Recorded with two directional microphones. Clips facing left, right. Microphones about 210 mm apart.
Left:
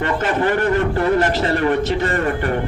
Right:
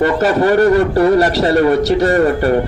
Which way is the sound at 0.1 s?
40° right (ahead or behind).